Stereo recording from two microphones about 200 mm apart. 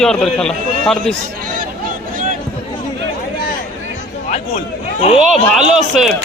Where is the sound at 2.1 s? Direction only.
45° right (ahead or behind).